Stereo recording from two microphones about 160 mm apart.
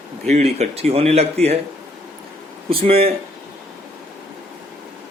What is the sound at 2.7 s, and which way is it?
Speech, 35° right (ahead or behind).